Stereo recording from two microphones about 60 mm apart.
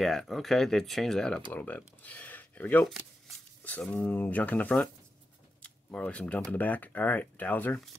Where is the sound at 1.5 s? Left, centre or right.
Left.